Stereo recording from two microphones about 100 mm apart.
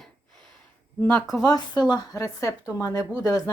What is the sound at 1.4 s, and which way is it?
A woman's voice, 45° left (ahead or behind).